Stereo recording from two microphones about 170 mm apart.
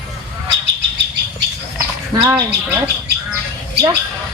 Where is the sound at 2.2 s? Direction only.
20° right (ahead or behind).